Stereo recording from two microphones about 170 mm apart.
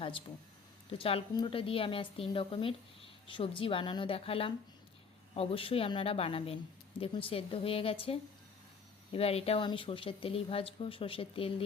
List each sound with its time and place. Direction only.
0.9 s a woman's voice: 35° left (ahead or behind)